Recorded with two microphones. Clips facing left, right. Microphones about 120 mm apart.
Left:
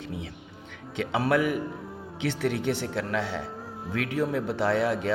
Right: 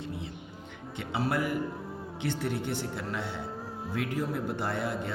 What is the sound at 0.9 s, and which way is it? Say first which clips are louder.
Speech: left 6 dB; 90° left.